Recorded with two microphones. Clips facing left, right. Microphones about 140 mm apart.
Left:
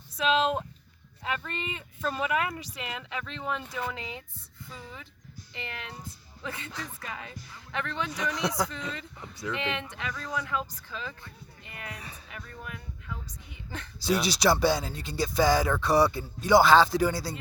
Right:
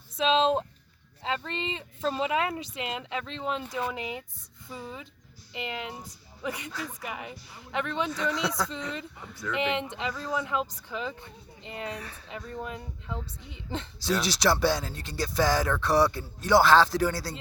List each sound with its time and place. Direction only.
0.2 s speech: 25° right (ahead or behind)
8.1 s speech: 20° left (ahead or behind)
9.6 s speech: 20° right (ahead or behind)
14.0 s speech: centre (ahead or behind)